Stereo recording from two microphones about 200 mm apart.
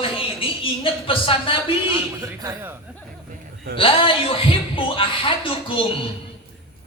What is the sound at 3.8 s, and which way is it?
Speech, 25° left (ahead or behind).